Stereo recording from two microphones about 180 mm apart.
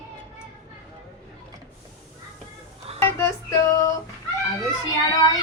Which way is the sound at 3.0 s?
15° left (ahead or behind).